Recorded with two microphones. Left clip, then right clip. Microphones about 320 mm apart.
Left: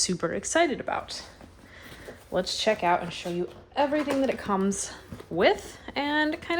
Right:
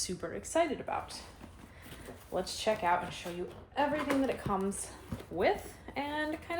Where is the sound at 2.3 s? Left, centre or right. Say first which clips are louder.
Left 7 dB; left.